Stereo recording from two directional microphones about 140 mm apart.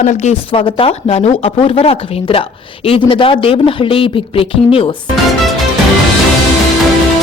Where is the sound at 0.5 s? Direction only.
40° left (ahead or behind).